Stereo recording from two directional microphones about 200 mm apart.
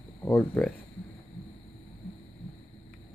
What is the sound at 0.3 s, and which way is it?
Speech, centre (ahead or behind).